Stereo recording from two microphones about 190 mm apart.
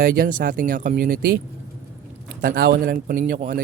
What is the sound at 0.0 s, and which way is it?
Speech, 50° right (ahead or behind).